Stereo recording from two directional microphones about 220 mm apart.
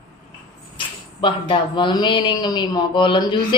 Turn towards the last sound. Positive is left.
turn(degrees=20)  # may be behind; listen again after turning